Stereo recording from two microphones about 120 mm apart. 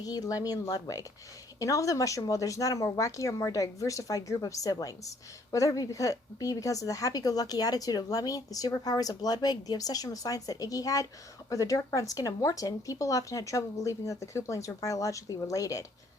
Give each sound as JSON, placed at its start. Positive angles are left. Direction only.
{"t": 0.0, "sound": "a woman's voice", "side_deg": 30}